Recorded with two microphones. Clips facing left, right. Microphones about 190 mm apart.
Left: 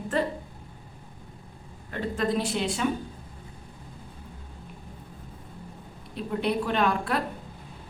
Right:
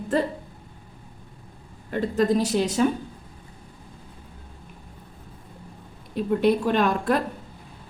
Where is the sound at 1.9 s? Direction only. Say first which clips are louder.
Right 6 dB; 40° right (ahead or behind).